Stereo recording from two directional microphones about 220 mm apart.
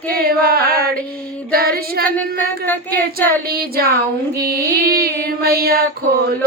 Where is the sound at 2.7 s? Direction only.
10° left (ahead or behind).